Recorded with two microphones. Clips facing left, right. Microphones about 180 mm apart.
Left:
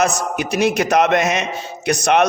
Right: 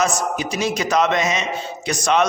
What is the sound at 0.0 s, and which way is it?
A man's voice, 60° left (ahead or behind).